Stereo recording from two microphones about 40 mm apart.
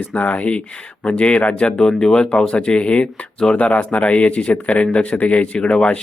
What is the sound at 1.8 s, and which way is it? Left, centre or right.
A man's voice, centre.